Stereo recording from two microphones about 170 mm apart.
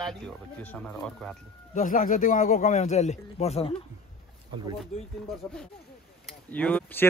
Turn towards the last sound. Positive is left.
turn(degrees=10)  # may be behind; listen again after turning